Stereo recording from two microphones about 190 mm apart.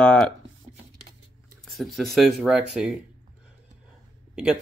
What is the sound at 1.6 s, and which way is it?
Speech, centre (ahead or behind).